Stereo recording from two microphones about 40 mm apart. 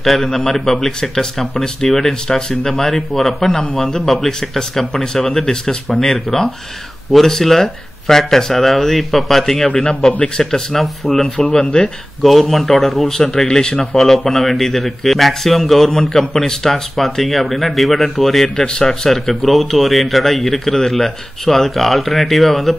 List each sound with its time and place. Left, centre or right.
0.0 s speech: centre
11.5 s speech: centre
12.2 s speech: centre
13.2 s speech: centre
13.7 s speech: centre
18.6 s speech: centre
18.9 s speech: centre